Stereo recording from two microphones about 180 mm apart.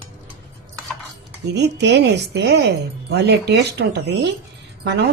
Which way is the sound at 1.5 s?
70° right (ahead or behind).